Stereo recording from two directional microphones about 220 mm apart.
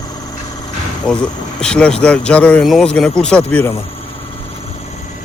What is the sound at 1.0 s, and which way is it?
Speech, 5° left (ahead or behind).